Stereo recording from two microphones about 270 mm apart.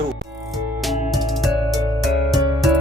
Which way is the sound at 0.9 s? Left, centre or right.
Centre.